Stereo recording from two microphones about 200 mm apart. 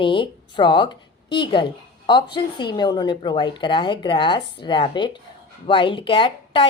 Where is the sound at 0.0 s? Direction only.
25° left (ahead or behind).